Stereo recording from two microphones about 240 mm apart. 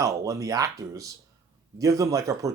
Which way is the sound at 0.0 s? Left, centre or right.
Centre.